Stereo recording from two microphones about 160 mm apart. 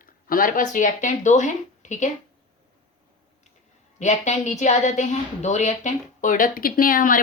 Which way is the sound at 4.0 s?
45° left (ahead or behind).